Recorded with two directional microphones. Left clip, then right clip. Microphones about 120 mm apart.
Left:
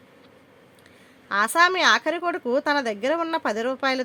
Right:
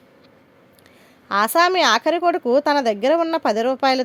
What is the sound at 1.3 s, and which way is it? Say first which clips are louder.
Speech: right 3 dB; 40° right (ahead or behind).